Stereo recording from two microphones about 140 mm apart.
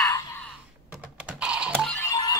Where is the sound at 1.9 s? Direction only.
25° left (ahead or behind).